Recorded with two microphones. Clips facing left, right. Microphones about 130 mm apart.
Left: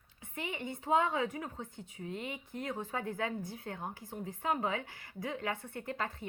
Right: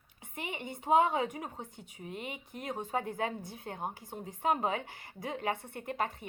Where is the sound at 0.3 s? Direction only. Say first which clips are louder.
Left 1 dB; 20° right (ahead or behind).